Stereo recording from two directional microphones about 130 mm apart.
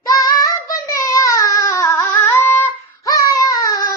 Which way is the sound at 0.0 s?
25° left (ahead or behind).